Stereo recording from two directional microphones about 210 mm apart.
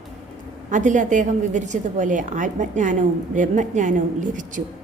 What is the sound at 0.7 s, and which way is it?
A woman's voice, 35° right (ahead or behind).